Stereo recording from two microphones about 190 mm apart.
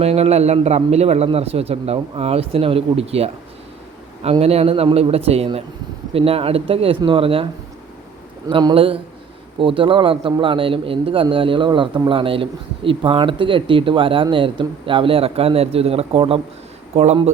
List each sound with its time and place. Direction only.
0.0 s a man's voice: 35° right (ahead or behind)
8.4 s a man's voice: 25° right (ahead or behind)